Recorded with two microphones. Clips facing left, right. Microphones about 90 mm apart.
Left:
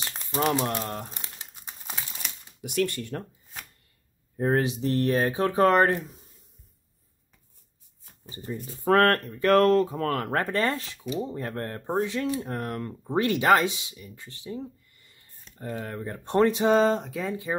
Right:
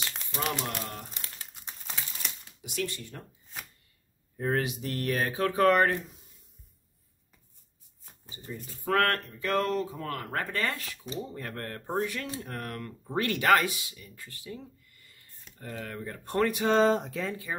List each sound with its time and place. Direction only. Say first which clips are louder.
0.3 s speech: left 8 dB; 35° left (ahead or behind)
1.5 s crumpling: left 1 dB; 5° left (ahead or behind)
2.6 s speech: left 8 dB; 55° left (ahead or behind)
4.4 s speech: left 5 dB; 30° left (ahead or behind)
8.5 s speech: left 7 dB; 35° left (ahead or behind); by 10.3 s 60° left (ahead or behind)
10.3 s speech: left 2 dB; 40° left (ahead or behind)
16.7 s speech: left 2 dB; centre (ahead or behind)
17.2 s speech: left 4 dB; 20° left (ahead or behind)